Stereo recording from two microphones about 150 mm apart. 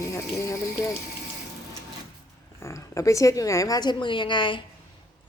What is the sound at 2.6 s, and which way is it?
A woman's voice, 20° left (ahead or behind).